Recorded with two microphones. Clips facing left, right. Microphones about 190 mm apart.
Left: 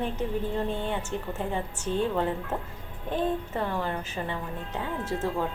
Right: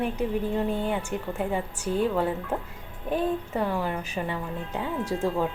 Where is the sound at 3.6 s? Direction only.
10° right (ahead or behind).